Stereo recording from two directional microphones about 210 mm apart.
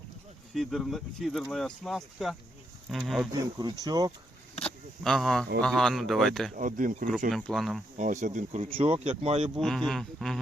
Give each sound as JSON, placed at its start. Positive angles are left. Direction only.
{"t": 0.5, "sound": "speech", "side_deg": 0}
{"t": 3.3, "sound": "speech", "side_deg": -20}
{"t": 4.6, "sound": "a sound", "side_deg": 0}
{"t": 5.6, "sound": "speech", "side_deg": 0}
{"t": 6.6, "sound": "speech", "side_deg": -40}
{"t": 7.3, "sound": "speech", "side_deg": 0}
{"t": 7.9, "sound": "speech", "side_deg": -35}
{"t": 9.6, "sound": "speech", "side_deg": 0}